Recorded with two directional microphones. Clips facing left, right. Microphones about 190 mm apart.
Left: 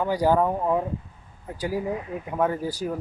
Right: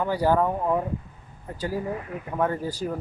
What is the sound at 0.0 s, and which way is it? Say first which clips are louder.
Speech: left 1 dB; 15° left (ahead or behind).